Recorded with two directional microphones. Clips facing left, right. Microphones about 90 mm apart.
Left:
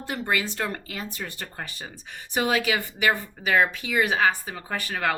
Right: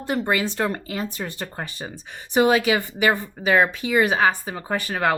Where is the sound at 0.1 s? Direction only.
25° right (ahead or behind).